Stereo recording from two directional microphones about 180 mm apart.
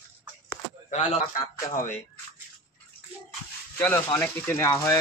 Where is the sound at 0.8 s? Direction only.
45° left (ahead or behind).